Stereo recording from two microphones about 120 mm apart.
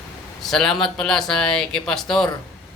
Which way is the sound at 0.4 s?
5° left (ahead or behind).